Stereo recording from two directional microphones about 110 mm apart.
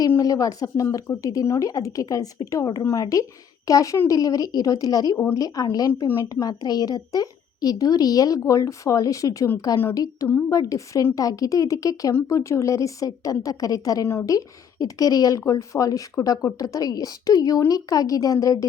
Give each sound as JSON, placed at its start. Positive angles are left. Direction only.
{"t": 0.2, "sound": "a woman's voice", "side_deg": 35}